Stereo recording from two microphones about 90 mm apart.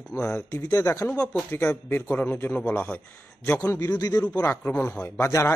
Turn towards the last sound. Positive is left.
turn(degrees=35)  # may be behind; listen again after turning